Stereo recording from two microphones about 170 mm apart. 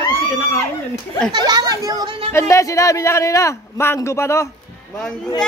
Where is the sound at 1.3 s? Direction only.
25° right (ahead or behind).